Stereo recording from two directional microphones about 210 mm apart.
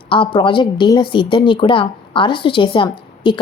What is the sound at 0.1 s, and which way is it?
A woman's voice, 25° left (ahead or behind).